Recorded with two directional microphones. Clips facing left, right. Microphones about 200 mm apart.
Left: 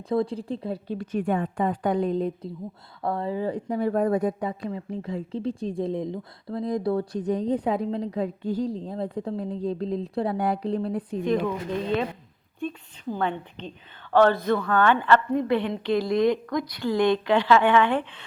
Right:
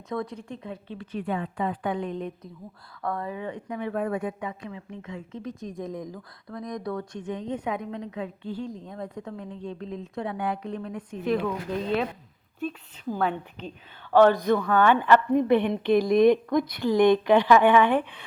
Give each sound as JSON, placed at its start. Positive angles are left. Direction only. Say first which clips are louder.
{"t": 0.1, "sound": "speech", "louder": "left 7 dB", "side_deg": 30}
{"t": 11.2, "sound": "speech", "louder": "even", "side_deg": -5}
{"t": 13.1, "sound": "a woman's voice", "louder": "right 1 dB", "side_deg": -5}